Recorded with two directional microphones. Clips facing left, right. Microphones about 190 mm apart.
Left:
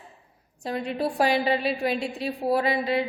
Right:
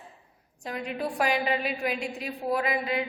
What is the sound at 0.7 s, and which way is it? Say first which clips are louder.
A woman's voice: left 4 dB; 30° left (ahead or behind).